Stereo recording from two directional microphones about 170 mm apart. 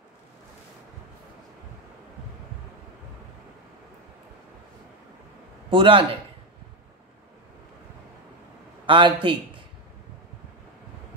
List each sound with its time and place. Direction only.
5.7 s a man's voice: 30° right (ahead or behind)
8.8 s a man's voice: 30° right (ahead or behind)